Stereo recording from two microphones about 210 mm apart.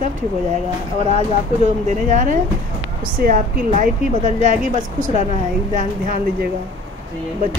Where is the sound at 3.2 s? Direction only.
50° right (ahead or behind).